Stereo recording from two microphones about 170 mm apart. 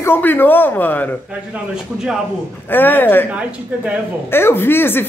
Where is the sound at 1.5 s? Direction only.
5° right (ahead or behind).